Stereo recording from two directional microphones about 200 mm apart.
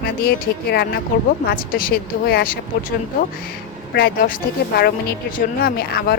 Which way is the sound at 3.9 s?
50° left (ahead or behind).